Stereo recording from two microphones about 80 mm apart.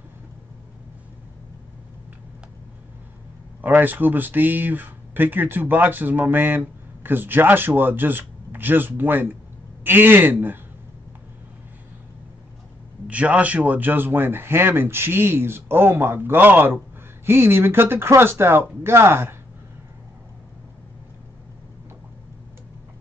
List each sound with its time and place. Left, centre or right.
3.6 s speech: right
13.0 s speech: centre; by 19.3 s right